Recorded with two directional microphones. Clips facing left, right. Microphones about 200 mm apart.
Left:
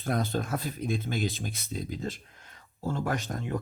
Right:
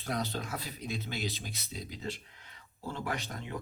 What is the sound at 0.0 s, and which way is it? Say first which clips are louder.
Speech: left 6 dB; 50° left (ahead or behind).